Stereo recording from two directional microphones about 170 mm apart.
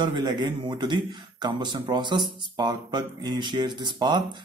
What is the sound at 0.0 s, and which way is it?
Speech, 25° right (ahead or behind).